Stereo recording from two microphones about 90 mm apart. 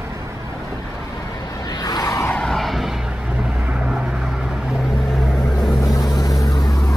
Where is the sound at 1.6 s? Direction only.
45° left (ahead or behind).